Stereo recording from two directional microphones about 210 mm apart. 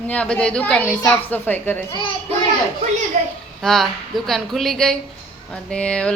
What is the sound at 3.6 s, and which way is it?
A woman's voice, centre (ahead or behind).